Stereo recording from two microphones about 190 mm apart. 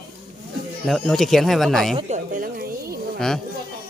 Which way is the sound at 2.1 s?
50° right (ahead or behind).